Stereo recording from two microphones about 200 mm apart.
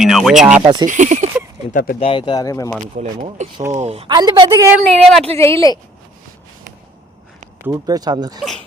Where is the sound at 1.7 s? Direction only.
50° left (ahead or behind).